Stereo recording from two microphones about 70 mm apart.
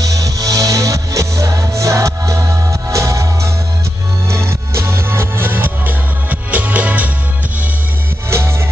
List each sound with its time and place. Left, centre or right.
0.0 s music: right
8.3 s music: right